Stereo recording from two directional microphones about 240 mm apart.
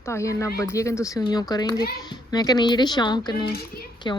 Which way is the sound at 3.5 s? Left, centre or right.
Left.